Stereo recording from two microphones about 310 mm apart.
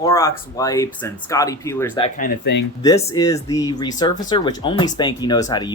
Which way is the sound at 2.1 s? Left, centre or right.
Left.